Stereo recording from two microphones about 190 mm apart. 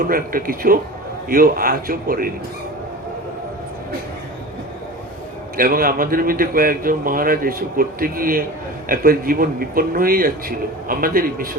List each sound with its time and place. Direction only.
0.0 s a man's voice: 50° right (ahead or behind)
5.5 s a man's voice: 50° right (ahead or behind)